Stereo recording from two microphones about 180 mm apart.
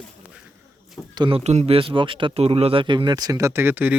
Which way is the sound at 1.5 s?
35° right (ahead or behind).